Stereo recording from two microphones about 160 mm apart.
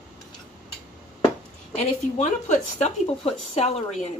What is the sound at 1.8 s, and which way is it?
Speech, 45° left (ahead or behind).